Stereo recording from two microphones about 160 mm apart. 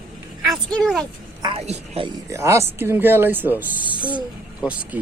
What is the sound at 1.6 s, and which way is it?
Speech, 45° right (ahead or behind).